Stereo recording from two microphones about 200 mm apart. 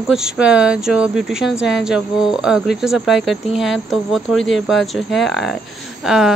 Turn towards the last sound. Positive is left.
turn(degrees=0)  # may be behind; listen again after turning